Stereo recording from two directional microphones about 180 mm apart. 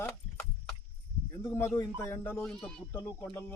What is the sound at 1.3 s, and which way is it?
Speech, 15° left (ahead or behind).